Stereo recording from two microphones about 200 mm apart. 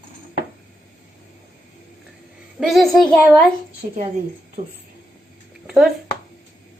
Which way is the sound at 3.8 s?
40° right (ahead or behind).